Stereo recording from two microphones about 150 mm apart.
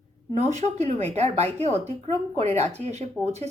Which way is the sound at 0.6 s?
50° right (ahead or behind).